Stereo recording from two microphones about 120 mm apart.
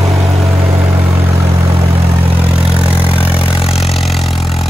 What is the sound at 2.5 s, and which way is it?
Vehicle, 10° right (ahead or behind).